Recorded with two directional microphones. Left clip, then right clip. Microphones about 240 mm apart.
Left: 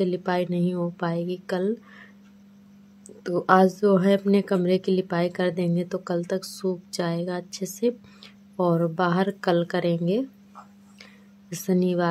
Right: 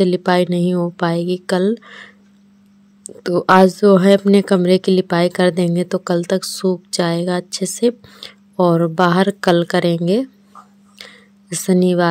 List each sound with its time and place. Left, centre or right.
0.0 s a woman's voice: right
3.3 s a woman's voice: right
11.0 s a sound: right